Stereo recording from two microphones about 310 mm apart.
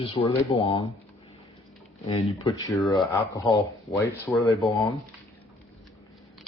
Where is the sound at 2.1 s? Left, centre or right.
Centre.